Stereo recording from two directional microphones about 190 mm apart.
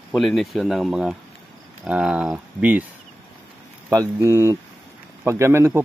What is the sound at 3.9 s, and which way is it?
Speech, 15° right (ahead or behind).